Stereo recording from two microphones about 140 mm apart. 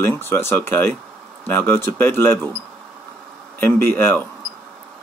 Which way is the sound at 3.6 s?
15° left (ahead or behind).